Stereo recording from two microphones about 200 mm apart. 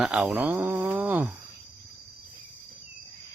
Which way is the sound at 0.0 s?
5° right (ahead or behind).